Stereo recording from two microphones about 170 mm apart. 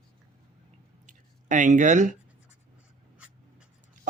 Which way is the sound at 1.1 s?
45° right (ahead or behind).